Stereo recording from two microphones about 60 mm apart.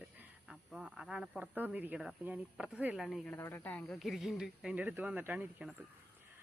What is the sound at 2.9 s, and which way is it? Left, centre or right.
Speech, centre.